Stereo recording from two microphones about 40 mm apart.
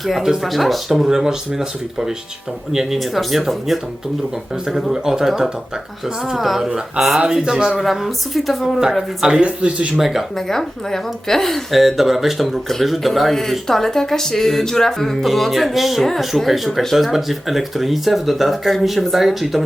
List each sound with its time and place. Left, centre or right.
0.4 s speech: centre
4.6 s speech: centre
7.8 s speech: centre
9.4 s speech: right
10.0 s speech: centre
10.3 s a woman's voice: centre
11.8 s speech: centre